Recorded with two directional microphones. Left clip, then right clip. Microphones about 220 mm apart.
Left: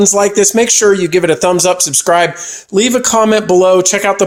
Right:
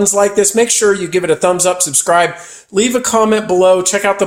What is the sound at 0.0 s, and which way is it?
Speech, 35° left (ahead or behind).